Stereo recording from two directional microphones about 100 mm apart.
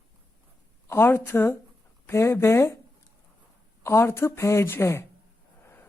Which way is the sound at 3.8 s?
25° left (ahead or behind).